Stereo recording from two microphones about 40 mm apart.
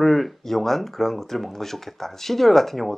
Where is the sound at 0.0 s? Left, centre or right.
Centre.